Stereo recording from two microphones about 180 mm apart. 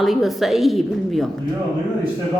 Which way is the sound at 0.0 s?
Centre (ahead or behind).